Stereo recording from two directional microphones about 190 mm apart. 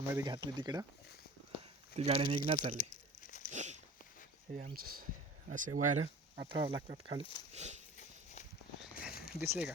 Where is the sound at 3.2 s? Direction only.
45° left (ahead or behind).